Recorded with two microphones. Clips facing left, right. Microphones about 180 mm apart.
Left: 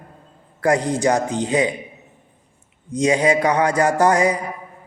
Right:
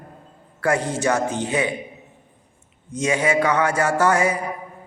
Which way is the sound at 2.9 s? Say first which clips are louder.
Left 6 dB; 35° left (ahead or behind).